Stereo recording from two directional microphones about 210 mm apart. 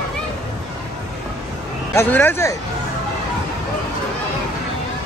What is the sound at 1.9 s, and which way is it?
Speech, 10° left (ahead or behind).